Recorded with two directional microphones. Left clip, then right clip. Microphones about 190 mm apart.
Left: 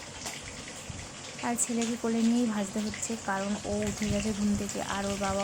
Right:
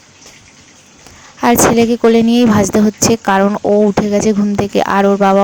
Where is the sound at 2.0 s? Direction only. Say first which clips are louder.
Right 19 dB; 50° right (ahead or behind).